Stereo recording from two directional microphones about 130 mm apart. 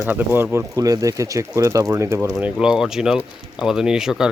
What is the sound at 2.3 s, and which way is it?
Speech, 5° right (ahead or behind).